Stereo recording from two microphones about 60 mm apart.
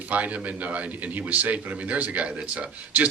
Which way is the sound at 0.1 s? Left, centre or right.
Right.